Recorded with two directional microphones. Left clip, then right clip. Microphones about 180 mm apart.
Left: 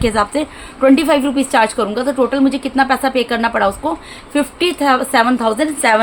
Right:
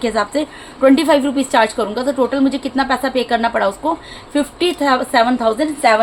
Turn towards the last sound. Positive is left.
turn(degrees=30)  # may be behind; listen again after turning